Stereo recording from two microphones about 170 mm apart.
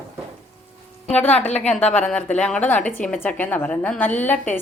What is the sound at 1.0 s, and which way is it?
Speech, 5° left (ahead or behind).